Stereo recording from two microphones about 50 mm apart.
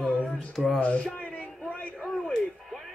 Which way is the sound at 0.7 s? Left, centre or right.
Left.